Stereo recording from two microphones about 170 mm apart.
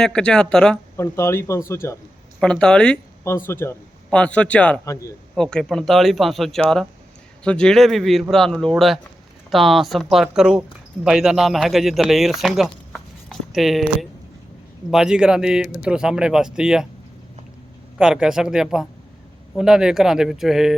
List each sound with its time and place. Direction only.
0.0 s speech: 5° left (ahead or behind)
0.9 s a man's voice: 15° left (ahead or behind)
2.4 s speech: 5° left (ahead or behind)
4.9 s speech: 20° left (ahead or behind)
5.3 s speech: 5° left (ahead or behind)
17.9 s speech: 5° right (ahead or behind)